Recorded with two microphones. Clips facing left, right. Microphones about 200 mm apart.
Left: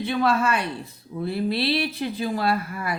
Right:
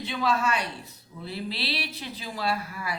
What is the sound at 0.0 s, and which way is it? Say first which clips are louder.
Speech: left 5 dB; 55° left (ahead or behind).